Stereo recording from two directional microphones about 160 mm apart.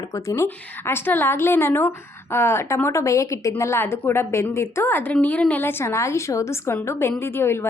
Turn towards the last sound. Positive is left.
turn(degrees=15)  # may be behind; listen again after turning